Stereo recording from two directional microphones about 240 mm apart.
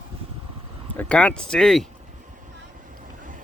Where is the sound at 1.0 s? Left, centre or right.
Centre.